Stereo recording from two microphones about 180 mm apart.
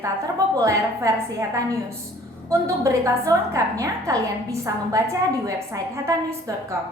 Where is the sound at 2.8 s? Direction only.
15° right (ahead or behind).